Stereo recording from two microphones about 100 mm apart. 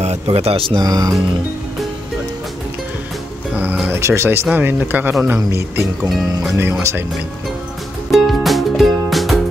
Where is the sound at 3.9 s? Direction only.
25° right (ahead or behind).